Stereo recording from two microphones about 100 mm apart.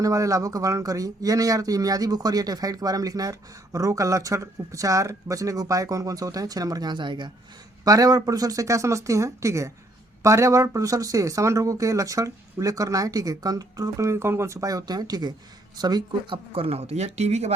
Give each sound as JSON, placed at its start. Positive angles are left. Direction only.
{"t": 0.0, "sound": "speech", "side_deg": -35}
{"t": 7.9, "sound": "speech", "side_deg": -40}
{"t": 16.6, "sound": "speech", "side_deg": -85}